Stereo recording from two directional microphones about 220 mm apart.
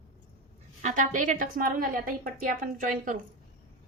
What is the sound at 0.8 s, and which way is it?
A woman's voice, 35° right (ahead or behind).